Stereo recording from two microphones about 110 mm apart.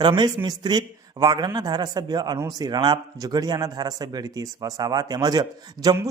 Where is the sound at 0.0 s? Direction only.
40° right (ahead or behind).